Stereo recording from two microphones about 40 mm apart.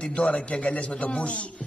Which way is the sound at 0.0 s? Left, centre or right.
Left.